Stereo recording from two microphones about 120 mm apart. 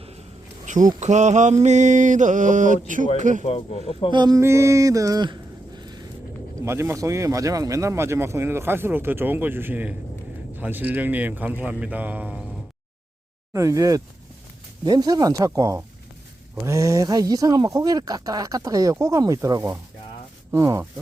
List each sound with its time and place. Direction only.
0.6 s a sound: 90° right
0.9 s mantra: 75° right (ahead or behind)
3.4 s speech: 60° left (ahead or behind)
4.1 s speech: 40° right (ahead or behind)
4.4 s a sound: 25° right (ahead or behind)
6.6 s a man's voice: 20° right (ahead or behind)
13.5 s speech: 25° right (ahead or behind)